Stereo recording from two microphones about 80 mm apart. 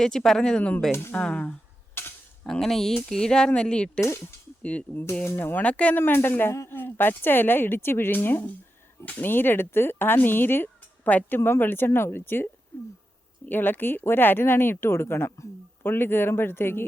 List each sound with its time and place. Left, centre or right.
0.0 s speech: centre
2.0 s a sound: left
2.4 s speech: centre
5.2 s speech: left
6.0 s speech: left